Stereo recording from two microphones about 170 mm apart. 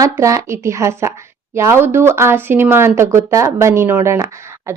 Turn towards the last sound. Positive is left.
turn(degrees=-15)  # may be behind; listen again after turning